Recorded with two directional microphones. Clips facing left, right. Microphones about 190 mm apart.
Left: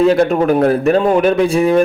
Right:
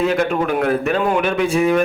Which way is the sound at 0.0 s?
35° left (ahead or behind).